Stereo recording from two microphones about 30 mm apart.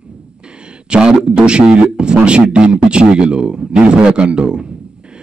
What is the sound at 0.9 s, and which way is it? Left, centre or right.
Speech, right.